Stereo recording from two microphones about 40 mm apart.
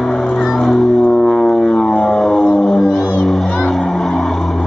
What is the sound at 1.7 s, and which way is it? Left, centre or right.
Music, centre.